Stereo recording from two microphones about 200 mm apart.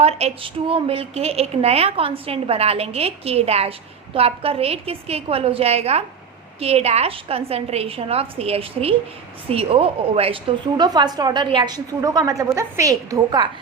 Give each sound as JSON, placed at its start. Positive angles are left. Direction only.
{"t": 0.0, "sound": "a woman's voice", "side_deg": -30}